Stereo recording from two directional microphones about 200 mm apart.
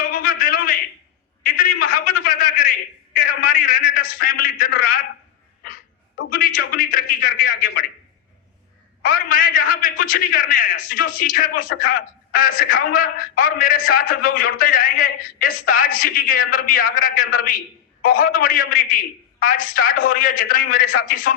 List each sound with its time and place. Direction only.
0.0 s a sound: 45° left (ahead or behind)
6.3 s a man's voice: 45° left (ahead or behind)
9.0 s a man's voice: 45° left (ahead or behind)